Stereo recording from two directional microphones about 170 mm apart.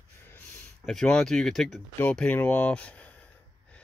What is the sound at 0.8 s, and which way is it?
Speech, 5° left (ahead or behind).